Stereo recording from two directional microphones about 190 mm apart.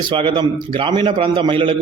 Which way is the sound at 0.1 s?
25° right (ahead or behind).